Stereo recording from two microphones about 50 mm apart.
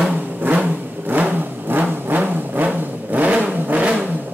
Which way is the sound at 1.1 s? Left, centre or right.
Right.